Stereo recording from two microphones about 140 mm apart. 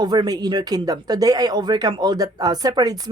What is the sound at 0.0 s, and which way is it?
Speech, 30° right (ahead or behind).